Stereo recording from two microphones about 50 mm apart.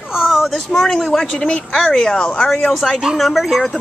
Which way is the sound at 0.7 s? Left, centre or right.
Centre.